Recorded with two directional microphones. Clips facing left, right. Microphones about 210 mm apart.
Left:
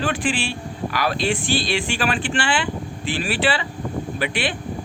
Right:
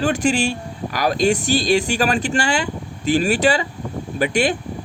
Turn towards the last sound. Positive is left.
turn(degrees=-45)  # may be behind; listen again after turning